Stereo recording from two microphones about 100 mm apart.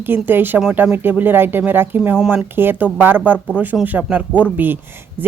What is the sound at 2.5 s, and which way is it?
Speech, 20° right (ahead or behind).